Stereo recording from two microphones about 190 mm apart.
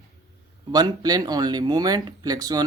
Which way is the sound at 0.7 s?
20° right (ahead or behind).